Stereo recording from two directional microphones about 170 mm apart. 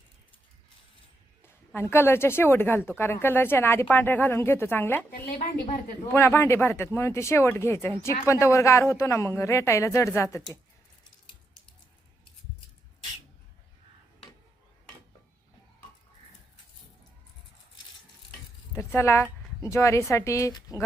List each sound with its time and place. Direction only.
1.4 s a woman's voice: 15° left (ahead or behind)
5.1 s a woman's voice: 60° left (ahead or behind)
6.1 s speech: 15° left (ahead or behind)
18.8 s keys jangling: 15° left (ahead or behind)
19.6 s speech: 20° left (ahead or behind)